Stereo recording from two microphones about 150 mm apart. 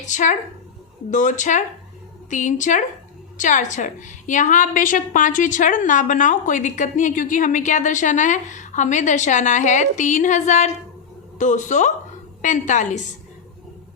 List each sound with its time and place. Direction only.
0.0 s a woman's voice: 55° left (ahead or behind)